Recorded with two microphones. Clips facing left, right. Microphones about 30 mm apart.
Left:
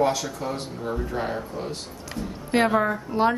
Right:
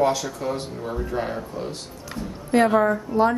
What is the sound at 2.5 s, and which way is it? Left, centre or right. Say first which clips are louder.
Speech: right 3 dB; left.